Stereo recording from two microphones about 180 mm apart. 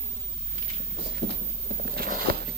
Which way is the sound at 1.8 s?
60° right (ahead or behind).